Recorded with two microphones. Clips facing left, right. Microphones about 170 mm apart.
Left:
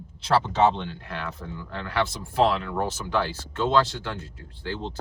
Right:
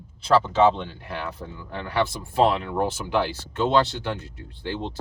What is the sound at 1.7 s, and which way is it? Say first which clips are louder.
Speech: right 2 dB; 15° right (ahead or behind).